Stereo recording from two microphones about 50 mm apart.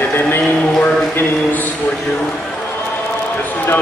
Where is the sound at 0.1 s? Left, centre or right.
Left.